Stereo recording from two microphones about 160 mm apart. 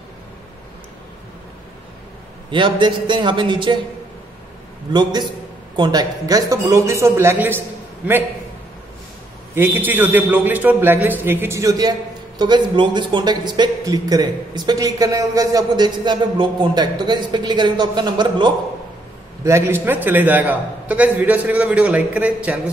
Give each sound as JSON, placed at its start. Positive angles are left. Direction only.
{"t": 2.5, "sound": "a man's voice", "side_deg": -30}
{"t": 4.9, "sound": "a man's voice", "side_deg": -25}
{"t": 9.6, "sound": "a man's voice", "side_deg": -10}
{"t": 19.4, "sound": "a man's voice", "side_deg": -15}